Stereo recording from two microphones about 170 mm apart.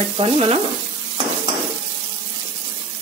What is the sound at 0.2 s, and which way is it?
Speech, 35° right (ahead or behind).